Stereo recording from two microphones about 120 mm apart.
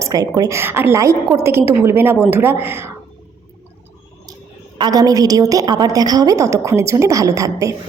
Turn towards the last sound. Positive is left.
turn(degrees=-25)  # may be behind; listen again after turning